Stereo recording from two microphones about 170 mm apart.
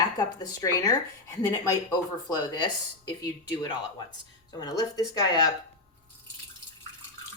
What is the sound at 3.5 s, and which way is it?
A woman's voice, 25° left (ahead or behind).